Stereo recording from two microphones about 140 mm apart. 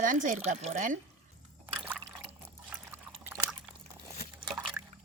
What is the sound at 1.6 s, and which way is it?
Liquid, 15° right (ahead or behind).